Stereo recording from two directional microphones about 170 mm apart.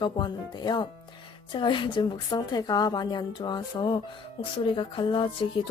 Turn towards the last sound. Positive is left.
turn(degrees=30)  # may be behind; listen again after turning